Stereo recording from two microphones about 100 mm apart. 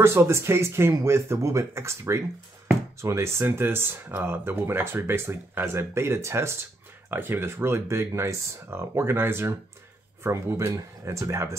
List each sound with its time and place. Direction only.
0.0 s speech: 25° right (ahead or behind)